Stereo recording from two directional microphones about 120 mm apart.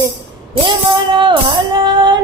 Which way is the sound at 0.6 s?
45° right (ahead or behind).